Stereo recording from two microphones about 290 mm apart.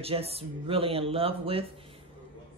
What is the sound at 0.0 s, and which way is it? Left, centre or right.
Speech, centre.